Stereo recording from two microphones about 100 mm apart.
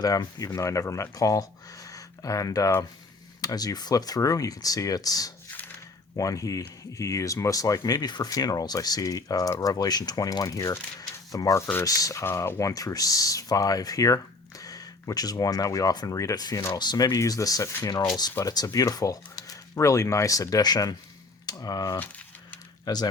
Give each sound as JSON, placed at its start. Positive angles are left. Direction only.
{"t": 0.0, "sound": "speech", "side_deg": 40}
{"t": 21.4, "sound": "cutlery", "side_deg": 40}
{"t": 22.9, "sound": "speech", "side_deg": 40}